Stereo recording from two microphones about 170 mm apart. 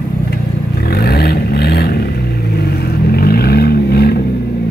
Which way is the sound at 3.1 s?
65° left (ahead or behind).